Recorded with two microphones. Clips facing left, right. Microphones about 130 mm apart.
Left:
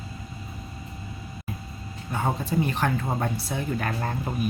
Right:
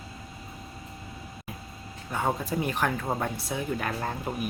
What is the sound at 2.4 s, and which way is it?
Speech, 10° right (ahead or behind).